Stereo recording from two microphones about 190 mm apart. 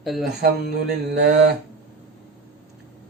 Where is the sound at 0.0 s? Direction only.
Centre (ahead or behind).